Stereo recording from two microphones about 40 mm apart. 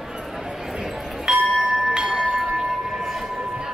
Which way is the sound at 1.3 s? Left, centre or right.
Centre.